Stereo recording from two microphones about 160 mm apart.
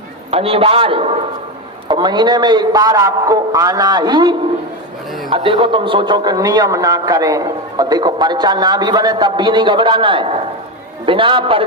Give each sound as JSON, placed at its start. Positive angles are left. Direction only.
{"t": 0.3, "sound": "a man's voice", "side_deg": -35}